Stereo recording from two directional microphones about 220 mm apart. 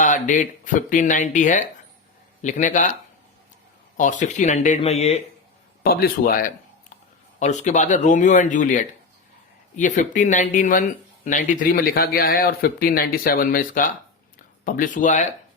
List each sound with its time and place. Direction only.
0.0 s speech: 35° left (ahead or behind)
3.9 s speech: 35° left (ahead or behind)
5.8 s speech: 45° left (ahead or behind)